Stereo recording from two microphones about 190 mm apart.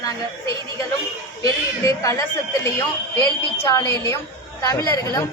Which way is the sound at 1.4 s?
15° left (ahead or behind).